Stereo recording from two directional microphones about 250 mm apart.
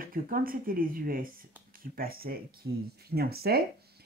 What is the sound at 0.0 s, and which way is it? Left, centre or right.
Speech, right.